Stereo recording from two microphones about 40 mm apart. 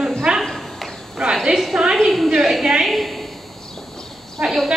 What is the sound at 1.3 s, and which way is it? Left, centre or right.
Speech, centre.